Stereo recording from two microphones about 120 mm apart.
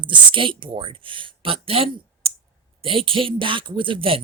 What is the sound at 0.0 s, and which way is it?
Speech, 45° right (ahead or behind).